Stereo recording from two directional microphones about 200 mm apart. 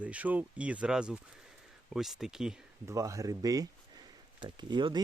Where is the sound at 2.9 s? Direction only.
15° right (ahead or behind).